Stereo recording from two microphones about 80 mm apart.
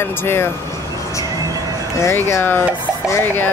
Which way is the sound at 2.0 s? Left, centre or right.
Left.